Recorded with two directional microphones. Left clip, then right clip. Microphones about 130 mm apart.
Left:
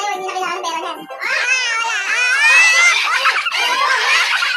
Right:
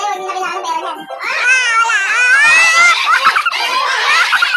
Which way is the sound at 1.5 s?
5° right (ahead or behind).